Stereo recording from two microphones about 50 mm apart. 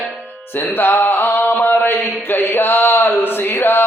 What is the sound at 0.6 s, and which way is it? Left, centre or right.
Mantra, left.